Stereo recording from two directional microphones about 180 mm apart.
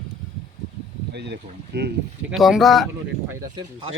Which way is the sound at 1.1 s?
70° right (ahead or behind).